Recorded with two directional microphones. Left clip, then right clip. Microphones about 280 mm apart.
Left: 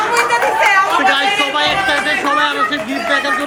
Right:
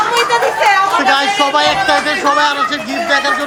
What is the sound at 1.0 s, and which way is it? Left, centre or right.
Speech, centre.